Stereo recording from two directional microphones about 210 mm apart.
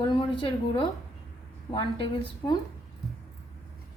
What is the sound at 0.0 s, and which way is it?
A woman's voice, 25° left (ahead or behind).